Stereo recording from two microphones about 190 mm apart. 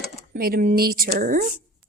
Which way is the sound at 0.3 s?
50° right (ahead or behind).